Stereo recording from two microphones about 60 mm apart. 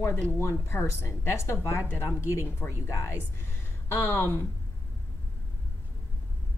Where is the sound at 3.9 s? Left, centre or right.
Left.